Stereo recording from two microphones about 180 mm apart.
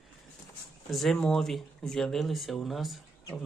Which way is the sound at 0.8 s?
Centre (ahead or behind).